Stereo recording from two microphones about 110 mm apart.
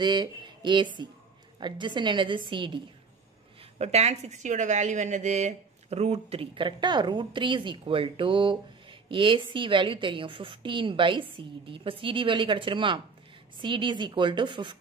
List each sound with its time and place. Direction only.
0.0 s a woman's voice: 40° right (ahead or behind)
3.7 s a woman's voice: 75° right (ahead or behind); by 14.8 s 45° right (ahead or behind)